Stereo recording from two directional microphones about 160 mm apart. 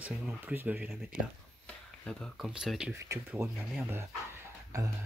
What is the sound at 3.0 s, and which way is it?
Speech, 20° right (ahead or behind).